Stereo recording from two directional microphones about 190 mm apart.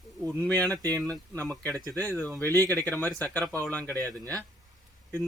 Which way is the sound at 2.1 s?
10° left (ahead or behind).